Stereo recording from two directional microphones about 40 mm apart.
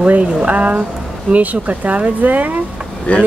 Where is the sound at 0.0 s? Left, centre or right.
Right.